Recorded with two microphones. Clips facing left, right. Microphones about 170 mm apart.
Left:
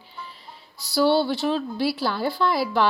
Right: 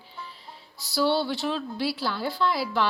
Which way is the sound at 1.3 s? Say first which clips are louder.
Left 5 dB; 50° left (ahead or behind).